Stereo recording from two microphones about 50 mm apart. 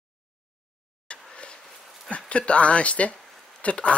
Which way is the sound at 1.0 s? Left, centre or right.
Left.